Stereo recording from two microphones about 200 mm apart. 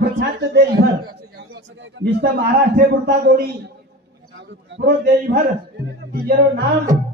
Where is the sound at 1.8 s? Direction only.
65° right (ahead or behind).